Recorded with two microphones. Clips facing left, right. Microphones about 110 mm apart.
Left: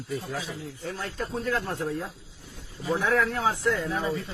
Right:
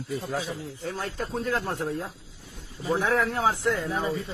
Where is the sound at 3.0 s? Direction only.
20° right (ahead or behind).